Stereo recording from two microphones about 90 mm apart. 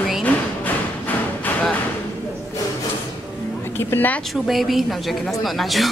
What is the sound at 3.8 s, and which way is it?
Speech, 25° left (ahead or behind).